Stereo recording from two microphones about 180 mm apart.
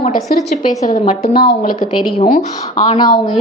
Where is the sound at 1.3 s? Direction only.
55° left (ahead or behind).